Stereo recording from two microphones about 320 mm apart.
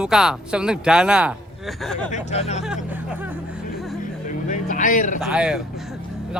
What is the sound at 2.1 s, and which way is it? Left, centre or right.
Speech, centre.